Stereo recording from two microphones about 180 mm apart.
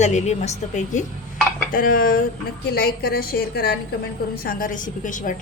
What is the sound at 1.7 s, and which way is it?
A woman's voice, 50° left (ahead or behind).